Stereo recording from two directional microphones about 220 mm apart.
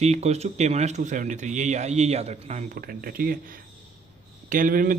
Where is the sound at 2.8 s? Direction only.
40° right (ahead or behind).